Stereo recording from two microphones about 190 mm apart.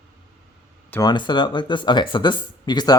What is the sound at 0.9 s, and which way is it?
Speech, 20° left (ahead or behind).